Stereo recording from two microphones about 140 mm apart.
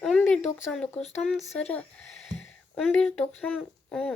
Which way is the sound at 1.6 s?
10° left (ahead or behind).